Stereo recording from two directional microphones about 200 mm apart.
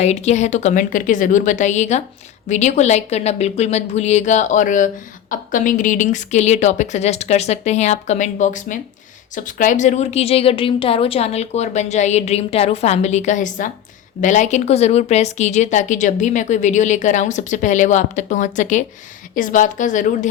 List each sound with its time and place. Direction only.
0.0 s speech: 35° left (ahead or behind)